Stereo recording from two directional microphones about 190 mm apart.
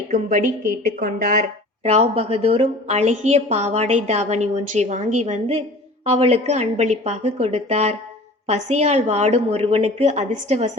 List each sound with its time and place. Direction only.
0.1 s speech: 40° right (ahead or behind)
1.8 s a woman's voice: 35° right (ahead or behind)